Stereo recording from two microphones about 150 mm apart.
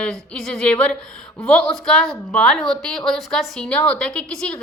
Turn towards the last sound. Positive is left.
turn(degrees=5)  # may be behind; listen again after turning